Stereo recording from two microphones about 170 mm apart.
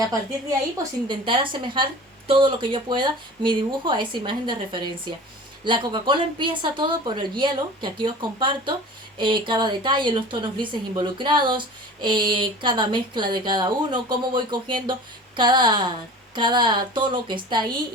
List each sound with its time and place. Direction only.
0.8 s a woman's voice: 30° right (ahead or behind)